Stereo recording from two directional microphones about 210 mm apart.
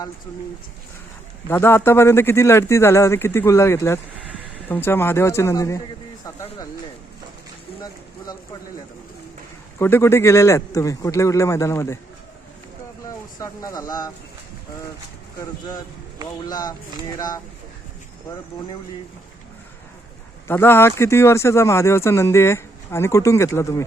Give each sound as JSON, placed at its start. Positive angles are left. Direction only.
{"t": 1.5, "sound": "speech", "side_deg": 10}
{"t": 9.7, "sound": "speech", "side_deg": 10}
{"t": 13.1, "sound": "speech", "side_deg": 15}
{"t": 16.5, "sound": "speech", "side_deg": 20}
{"t": 20.5, "sound": "speech", "side_deg": 10}